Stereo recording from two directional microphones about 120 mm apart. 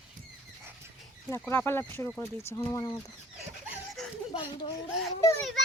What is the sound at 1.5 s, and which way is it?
Speech, 20° left (ahead or behind).